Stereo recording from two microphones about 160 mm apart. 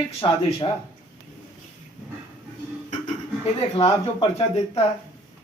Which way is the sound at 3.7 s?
40° left (ahead or behind).